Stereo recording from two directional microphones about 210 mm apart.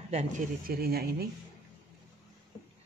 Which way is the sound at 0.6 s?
45° right (ahead or behind).